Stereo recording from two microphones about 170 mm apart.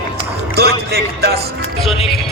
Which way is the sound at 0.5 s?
70° right (ahead or behind).